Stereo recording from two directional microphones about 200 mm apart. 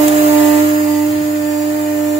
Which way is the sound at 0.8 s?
Centre (ahead or behind).